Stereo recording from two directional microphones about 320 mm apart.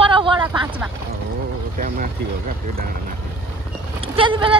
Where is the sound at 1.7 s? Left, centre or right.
Right.